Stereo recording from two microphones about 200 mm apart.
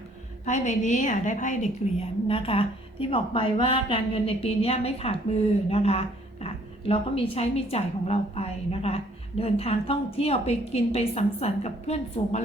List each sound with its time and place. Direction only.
0.4 s a woman's voice: 40° left (ahead or behind)